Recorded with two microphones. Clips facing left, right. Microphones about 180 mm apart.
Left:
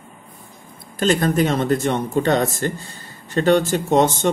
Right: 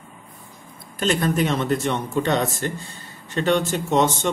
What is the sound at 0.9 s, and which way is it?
Speech, 40° left (ahead or behind).